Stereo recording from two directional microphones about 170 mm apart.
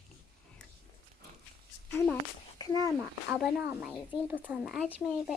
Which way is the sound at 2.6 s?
20° left (ahead or behind).